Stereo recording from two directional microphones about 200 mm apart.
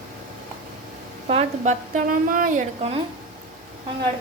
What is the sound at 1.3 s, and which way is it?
A woman's voice, 35° right (ahead or behind).